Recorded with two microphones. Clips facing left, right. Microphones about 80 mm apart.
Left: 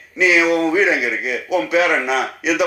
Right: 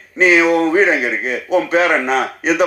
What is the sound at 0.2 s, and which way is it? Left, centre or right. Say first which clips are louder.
A man's voice: right 3 dB; right.